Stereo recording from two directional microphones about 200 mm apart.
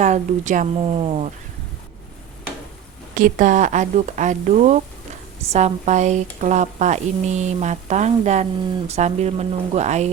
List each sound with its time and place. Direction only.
0.0 s speech: 35° right (ahead or behind)
3.2 s speech: 40° right (ahead or behind)